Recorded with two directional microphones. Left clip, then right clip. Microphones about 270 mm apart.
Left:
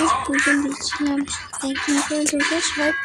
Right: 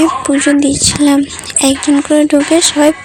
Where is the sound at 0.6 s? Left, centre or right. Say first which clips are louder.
Right 12 dB; right.